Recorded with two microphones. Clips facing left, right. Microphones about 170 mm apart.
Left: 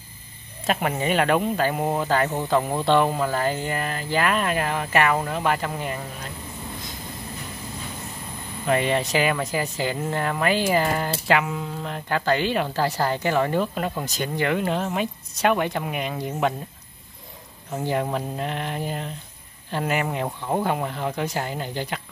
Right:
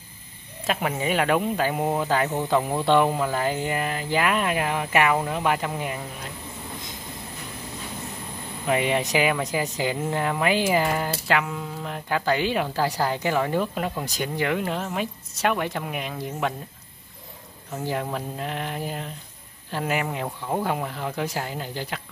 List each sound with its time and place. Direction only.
0.7 s speech: centre (ahead or behind)
8.6 s speech: 10° right (ahead or behind)
11.2 s speech: 5° left (ahead or behind)
11.8 s speech: 10° right (ahead or behind)
17.8 s speech: centre (ahead or behind)
20.2 s speech: 10° left (ahead or behind)
20.6 s speech: centre (ahead or behind)